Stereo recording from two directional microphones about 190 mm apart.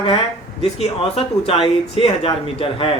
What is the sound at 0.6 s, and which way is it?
Speech, 35° left (ahead or behind).